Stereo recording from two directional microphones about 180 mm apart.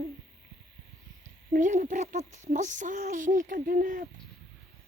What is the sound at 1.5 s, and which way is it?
Speech, 45° right (ahead or behind).